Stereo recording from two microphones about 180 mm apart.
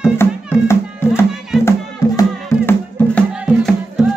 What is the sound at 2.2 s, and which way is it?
Music, 10° left (ahead or behind).